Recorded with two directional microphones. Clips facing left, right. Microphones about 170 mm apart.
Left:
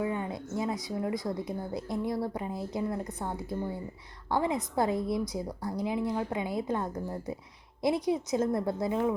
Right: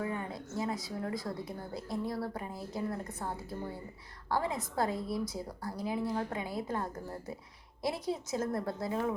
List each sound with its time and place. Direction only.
0.0 s speech: 20° left (ahead or behind)